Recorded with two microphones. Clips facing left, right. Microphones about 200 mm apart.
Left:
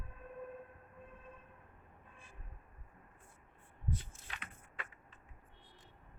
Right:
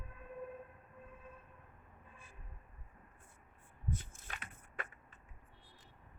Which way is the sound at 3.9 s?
45° right (ahead or behind).